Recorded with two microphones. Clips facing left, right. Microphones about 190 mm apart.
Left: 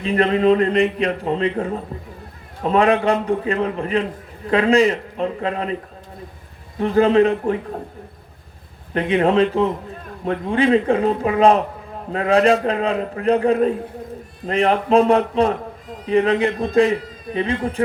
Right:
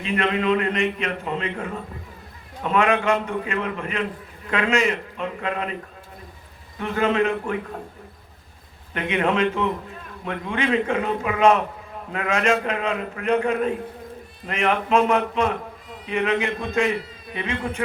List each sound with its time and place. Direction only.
0.0 s a man's voice: 35° left (ahead or behind)
6.7 s a man's voice: 35° left (ahead or behind)
8.9 s a man's voice: 35° left (ahead or behind)